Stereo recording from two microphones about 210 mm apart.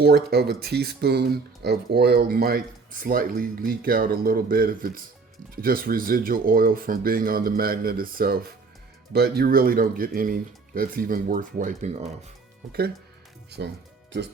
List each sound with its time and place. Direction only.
0.0 s speech: 50° right (ahead or behind); by 12.1 s 30° right (ahead or behind)
13.6 s speech: 50° right (ahead or behind)